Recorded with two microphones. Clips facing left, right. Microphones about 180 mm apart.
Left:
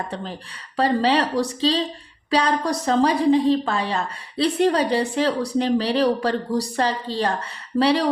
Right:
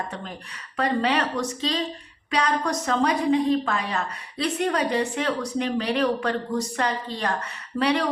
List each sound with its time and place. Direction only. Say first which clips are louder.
0.8 s a woman's voice: left 4 dB; 30° left (ahead or behind)